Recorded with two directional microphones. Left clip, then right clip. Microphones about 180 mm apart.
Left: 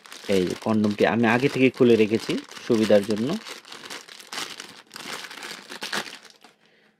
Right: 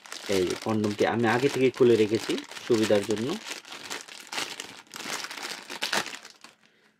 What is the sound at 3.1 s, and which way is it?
Speech, 5° right (ahead or behind).